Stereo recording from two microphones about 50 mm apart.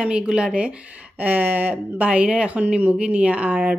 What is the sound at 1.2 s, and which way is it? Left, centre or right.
Speech, right.